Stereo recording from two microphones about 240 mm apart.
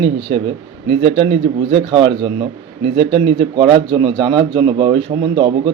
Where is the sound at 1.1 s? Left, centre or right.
Right.